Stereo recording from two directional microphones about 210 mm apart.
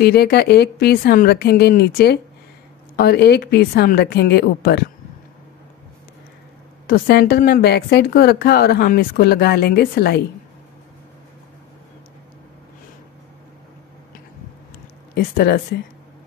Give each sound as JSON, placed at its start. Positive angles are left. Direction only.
{"t": 0.0, "sound": "a woman's voice", "side_deg": 50}
{"t": 6.9, "sound": "a woman's voice", "side_deg": 50}
{"t": 15.1, "sound": "a woman's voice", "side_deg": 45}